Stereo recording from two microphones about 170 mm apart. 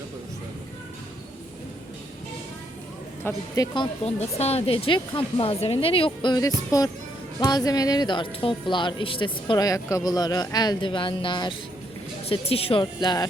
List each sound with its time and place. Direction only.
3.2 s speech: 20° left (ahead or behind)
4.0 s speech: 35° left (ahead or behind)